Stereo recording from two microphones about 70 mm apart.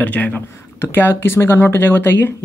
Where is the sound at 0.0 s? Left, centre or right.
Left.